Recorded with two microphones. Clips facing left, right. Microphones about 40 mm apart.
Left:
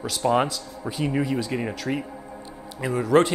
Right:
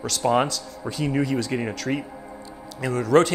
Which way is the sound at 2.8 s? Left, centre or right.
Centre.